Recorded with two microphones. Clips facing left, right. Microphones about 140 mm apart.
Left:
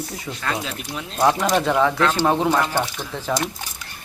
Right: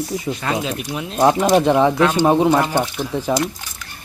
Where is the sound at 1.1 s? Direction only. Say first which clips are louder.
Right 4 dB; 25° right (ahead or behind).